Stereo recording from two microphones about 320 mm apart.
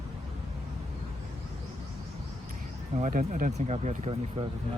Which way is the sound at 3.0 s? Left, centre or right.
Right.